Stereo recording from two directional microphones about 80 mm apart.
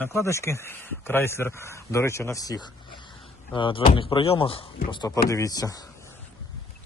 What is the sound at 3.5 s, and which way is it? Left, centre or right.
Speech, left.